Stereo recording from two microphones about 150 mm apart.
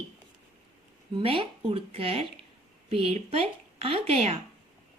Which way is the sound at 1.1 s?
35° right (ahead or behind).